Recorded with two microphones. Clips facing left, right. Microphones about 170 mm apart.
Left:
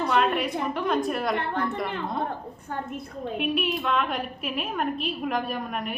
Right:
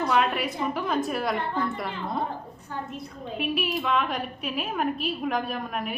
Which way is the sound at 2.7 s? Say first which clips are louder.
Left 2 dB; 50° left (ahead or behind).